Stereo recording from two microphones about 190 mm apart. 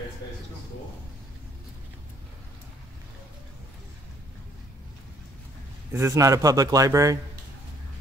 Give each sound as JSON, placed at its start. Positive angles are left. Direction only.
{"t": 5.9, "sound": "a man's voice", "side_deg": -15}